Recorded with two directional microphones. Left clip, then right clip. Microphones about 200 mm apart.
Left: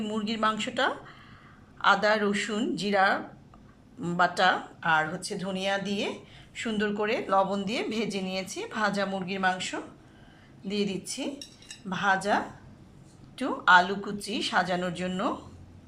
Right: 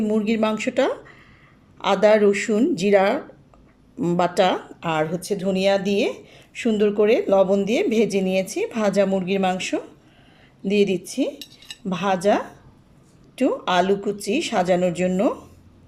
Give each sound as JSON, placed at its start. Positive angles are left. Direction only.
{"t": 0.0, "sound": "speech", "side_deg": -30}
{"t": 11.0, "sound": "speech", "side_deg": -35}